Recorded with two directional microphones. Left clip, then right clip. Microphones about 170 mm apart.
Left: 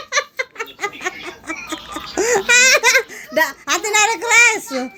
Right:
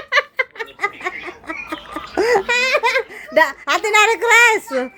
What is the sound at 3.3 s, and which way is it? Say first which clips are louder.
A child's voice: right 3 dB; 25° right (ahead or behind).